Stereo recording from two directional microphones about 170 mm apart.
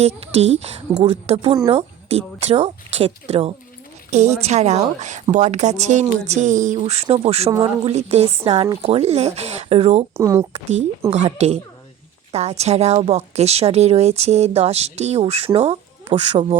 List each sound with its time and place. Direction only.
0.2 s a woman's voice: 35° right (ahead or behind)
10.2 s speech: 15° right (ahead or behind)
10.5 s a woman's voice: 40° right (ahead or behind)